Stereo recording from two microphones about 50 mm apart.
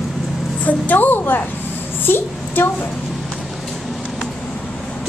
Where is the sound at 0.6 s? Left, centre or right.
Left.